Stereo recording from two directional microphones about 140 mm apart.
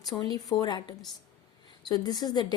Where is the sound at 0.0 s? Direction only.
30° left (ahead or behind).